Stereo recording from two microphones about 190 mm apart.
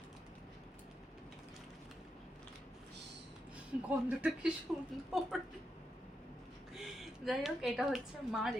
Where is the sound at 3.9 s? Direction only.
5° right (ahead or behind).